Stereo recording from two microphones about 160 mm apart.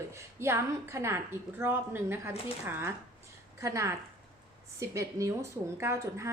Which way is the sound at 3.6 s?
20° right (ahead or behind).